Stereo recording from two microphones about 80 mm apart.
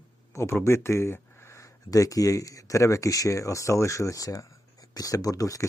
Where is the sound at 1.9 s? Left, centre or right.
Left.